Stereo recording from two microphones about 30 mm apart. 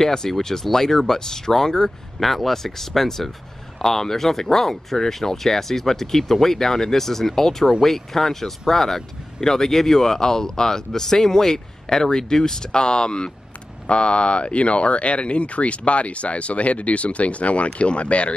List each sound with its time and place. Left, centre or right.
0.0 s speech: centre; by 18.3 s left